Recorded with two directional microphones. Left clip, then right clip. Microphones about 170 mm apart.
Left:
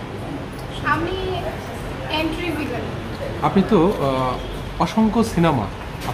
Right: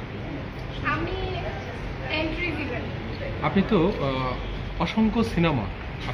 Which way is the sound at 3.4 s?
15° left (ahead or behind).